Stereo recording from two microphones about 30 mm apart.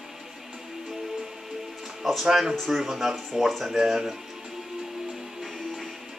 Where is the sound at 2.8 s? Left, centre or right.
Centre.